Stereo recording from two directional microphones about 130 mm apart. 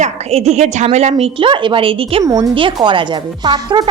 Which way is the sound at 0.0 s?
55° right (ahead or behind).